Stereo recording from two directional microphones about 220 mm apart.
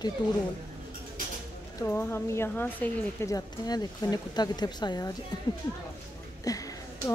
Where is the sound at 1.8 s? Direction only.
10° left (ahead or behind).